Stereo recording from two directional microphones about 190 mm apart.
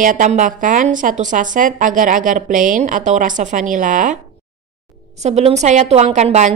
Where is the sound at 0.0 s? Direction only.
40° right (ahead or behind).